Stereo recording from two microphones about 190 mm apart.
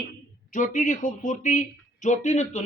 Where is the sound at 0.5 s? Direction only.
40° left (ahead or behind).